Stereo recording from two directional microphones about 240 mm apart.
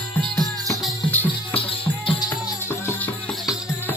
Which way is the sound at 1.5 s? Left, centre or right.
Left.